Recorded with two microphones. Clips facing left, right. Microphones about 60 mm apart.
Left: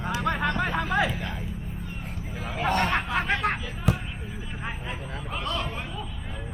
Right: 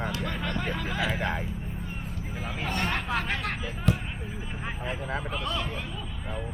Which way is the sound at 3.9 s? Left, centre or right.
Centre.